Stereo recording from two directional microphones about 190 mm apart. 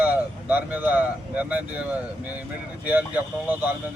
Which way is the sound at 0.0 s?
10° right (ahead or behind).